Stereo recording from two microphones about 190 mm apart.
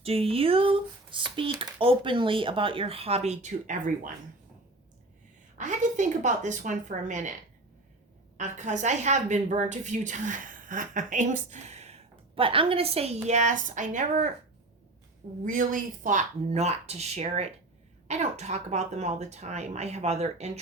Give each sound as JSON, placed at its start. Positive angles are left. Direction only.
{"t": 0.0, "sound": "speech", "side_deg": -30}
{"t": 5.5, "sound": "speech", "side_deg": -40}
{"t": 8.4, "sound": "a woman's voice", "side_deg": -40}
{"t": 15.4, "sound": "speech", "side_deg": -45}